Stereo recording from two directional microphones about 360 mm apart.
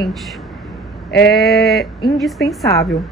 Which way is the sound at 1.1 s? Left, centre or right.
Left.